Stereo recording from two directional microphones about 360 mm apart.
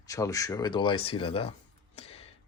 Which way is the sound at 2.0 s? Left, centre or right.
Centre.